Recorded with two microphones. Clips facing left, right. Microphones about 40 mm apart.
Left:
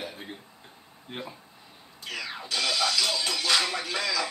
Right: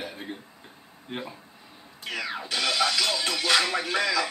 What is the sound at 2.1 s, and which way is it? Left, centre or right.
Music, right.